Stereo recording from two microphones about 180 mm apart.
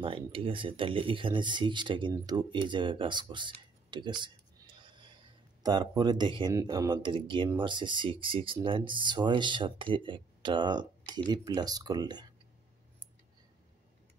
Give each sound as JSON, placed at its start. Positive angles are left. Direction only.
{"t": 0.0, "sound": "speech", "side_deg": -30}